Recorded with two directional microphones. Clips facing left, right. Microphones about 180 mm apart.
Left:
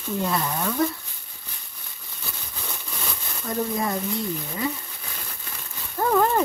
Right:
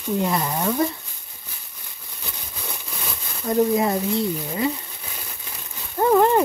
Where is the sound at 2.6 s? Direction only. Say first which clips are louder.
Right 1 dB; 15° right (ahead or behind).